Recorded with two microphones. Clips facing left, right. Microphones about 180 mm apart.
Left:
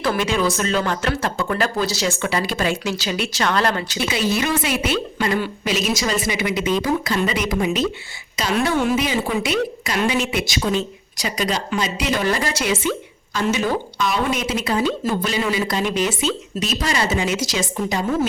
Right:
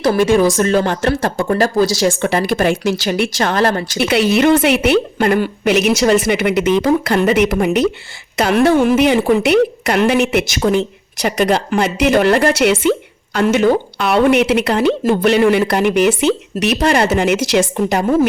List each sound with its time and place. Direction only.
0.0 s a woman's voice: 45° right (ahead or behind)
3.9 s a woman's voice: 70° right (ahead or behind)